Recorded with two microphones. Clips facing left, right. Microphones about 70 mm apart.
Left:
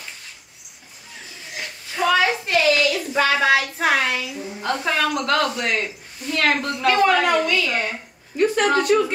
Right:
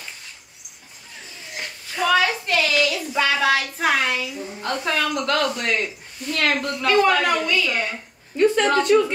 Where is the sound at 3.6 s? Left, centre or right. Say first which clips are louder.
Left 1 dB; centre.